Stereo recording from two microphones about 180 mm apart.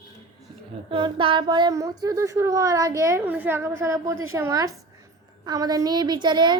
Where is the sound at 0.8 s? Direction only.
30° right (ahead or behind).